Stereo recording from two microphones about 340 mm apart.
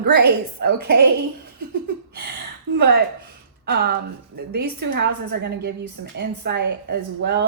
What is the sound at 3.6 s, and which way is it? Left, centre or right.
A woman's voice, right.